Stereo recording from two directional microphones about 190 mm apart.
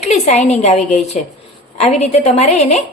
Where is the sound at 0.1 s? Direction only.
35° left (ahead or behind).